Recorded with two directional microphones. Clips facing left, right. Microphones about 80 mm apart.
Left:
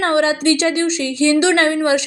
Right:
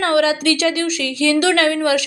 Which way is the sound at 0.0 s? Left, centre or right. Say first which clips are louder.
Even; left.